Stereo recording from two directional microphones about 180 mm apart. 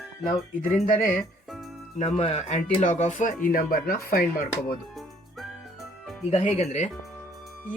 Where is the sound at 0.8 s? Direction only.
50° left (ahead or behind).